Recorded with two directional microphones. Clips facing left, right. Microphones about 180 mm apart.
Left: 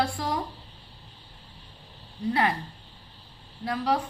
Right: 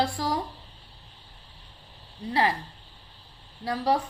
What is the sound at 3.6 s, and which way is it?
Speech, 35° right (ahead or behind).